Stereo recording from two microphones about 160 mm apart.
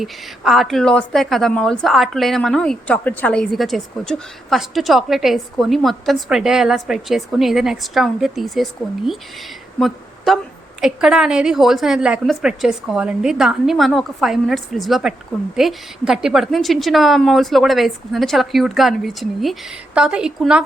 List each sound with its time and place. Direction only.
0.0 s a woman's voice: centre (ahead or behind)